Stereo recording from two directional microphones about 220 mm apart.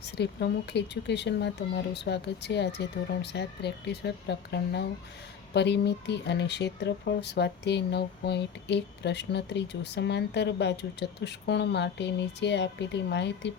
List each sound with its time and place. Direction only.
0.0 s speech: 50° left (ahead or behind)